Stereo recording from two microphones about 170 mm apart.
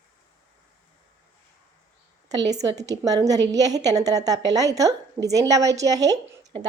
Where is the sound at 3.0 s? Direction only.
20° right (ahead or behind).